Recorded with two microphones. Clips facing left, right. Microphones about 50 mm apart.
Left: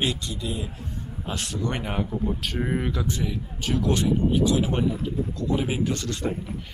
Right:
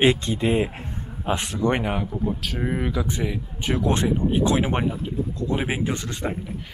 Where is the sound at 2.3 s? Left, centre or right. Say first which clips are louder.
Even; centre.